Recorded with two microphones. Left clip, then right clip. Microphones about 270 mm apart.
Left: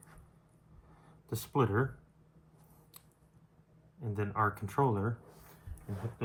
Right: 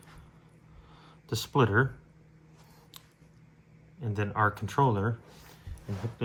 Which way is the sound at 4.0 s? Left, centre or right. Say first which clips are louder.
Right 4 dB; right.